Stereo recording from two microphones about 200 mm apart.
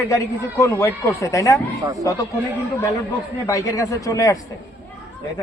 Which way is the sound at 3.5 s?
15° left (ahead or behind).